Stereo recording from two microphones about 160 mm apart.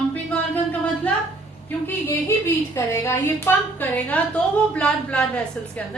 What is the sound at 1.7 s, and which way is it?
A woman's voice, 10° left (ahead or behind).